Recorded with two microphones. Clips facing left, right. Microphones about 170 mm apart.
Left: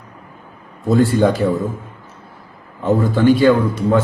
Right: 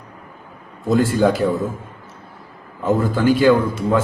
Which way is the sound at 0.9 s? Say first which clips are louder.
Left 2 dB; 10° right (ahead or behind).